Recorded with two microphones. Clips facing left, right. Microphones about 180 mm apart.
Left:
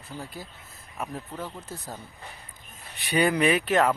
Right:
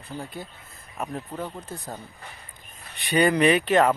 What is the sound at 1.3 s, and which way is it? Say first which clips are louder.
Speech: right 3 dB; 15° right (ahead or behind).